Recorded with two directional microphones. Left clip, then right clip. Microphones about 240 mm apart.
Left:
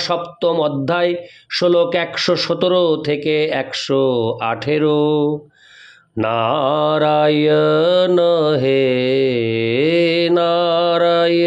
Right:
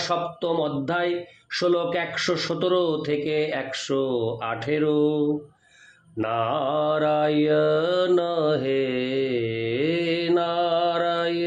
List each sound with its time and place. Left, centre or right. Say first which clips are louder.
0.0 s mantra: left 7 dB; left